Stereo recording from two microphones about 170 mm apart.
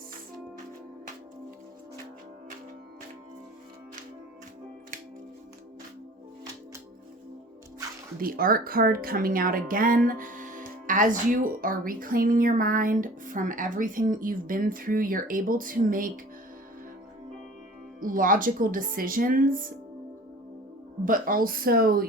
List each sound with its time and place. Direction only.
8.2 s speech: 60° right (ahead or behind)
18.0 s speech: 55° right (ahead or behind)
21.0 s speech: 55° right (ahead or behind)